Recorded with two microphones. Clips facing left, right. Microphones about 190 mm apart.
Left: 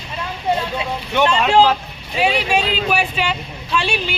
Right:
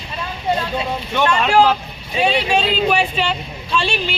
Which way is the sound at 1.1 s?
20° left (ahead or behind).